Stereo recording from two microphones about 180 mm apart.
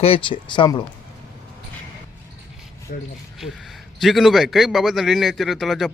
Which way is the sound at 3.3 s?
Centre (ahead or behind).